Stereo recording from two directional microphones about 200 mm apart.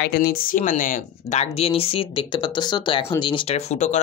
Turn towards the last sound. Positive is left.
turn(degrees=35)  # may be behind; listen again after turning